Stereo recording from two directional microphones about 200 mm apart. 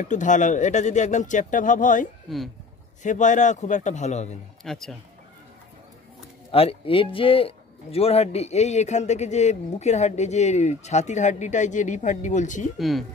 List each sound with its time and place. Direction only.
0.0 s speech: 40° left (ahead or behind)
2.2 s speech: centre (ahead or behind)
3.0 s speech: 40° left (ahead or behind)
4.6 s speech: centre (ahead or behind)
6.5 s speech: 30° left (ahead or behind)
12.7 s speech: centre (ahead or behind)